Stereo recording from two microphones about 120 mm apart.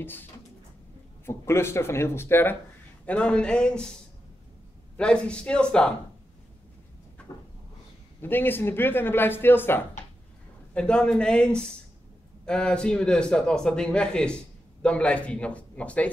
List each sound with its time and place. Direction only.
0.0 s a man's voice: 15° left (ahead or behind)
3.1 s a man's voice: 10° left (ahead or behind)
4.9 s a man's voice: 10° left (ahead or behind)
8.2 s a man's voice: 15° left (ahead or behind)
10.7 s a man's voice: 5° left (ahead or behind)